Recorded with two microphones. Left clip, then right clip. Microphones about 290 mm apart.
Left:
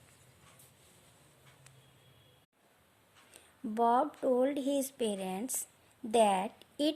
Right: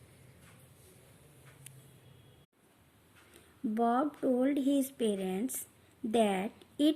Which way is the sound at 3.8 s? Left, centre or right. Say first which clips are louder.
Left 2 dB; left.